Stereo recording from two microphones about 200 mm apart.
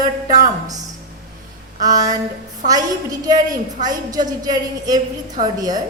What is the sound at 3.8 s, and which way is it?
A woman's voice, 20° right (ahead or behind).